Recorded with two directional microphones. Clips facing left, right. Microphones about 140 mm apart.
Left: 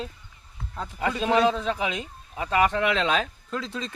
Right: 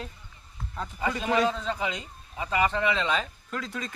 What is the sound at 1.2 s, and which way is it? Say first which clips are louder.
A man's voice: left 4 dB; 70° left (ahead or behind).